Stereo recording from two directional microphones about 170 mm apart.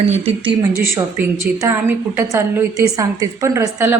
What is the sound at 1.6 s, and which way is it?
A woman's voice, 15° right (ahead or behind).